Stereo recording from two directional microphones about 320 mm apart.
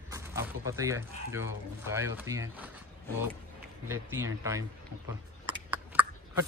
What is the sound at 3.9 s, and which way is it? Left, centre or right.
Speech, centre.